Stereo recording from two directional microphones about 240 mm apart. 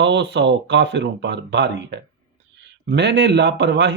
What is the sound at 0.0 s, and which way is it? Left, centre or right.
Speech, right.